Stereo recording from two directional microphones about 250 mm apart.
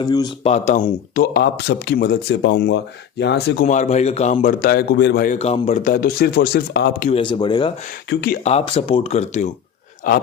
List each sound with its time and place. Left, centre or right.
0.0 s speech: centre
0.5 s a man's voice: left
3.7 s a man's voice: left
7.1 s speech: centre
8.1 s a man's voice: left
8.4 s a man's voice: left